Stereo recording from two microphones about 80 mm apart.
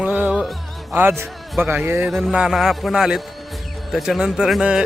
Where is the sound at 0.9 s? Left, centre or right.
Right.